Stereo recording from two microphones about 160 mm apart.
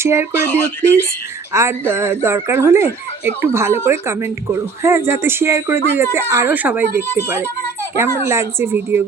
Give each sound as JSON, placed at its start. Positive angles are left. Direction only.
{"t": 0.0, "sound": "speech", "side_deg": -15}